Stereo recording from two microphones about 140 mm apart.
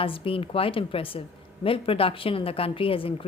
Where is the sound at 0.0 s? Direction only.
40° left (ahead or behind).